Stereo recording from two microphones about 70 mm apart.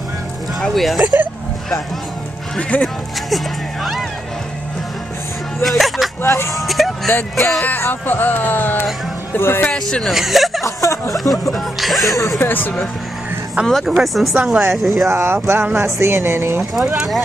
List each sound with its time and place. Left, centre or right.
0.6 s speech: centre
2.7 s speech: left
3.3 s speech: centre
5.6 s speech: centre
6.2 s speech: left
6.5 s vehicle: centre
7.1 s speech: left
9.7 s speech: centre
10.6 s a sound: left
11.5 s speech: centre
12.4 s speech: left
13.7 s speech: centre
15.0 s speech: right
16.9 s speech: centre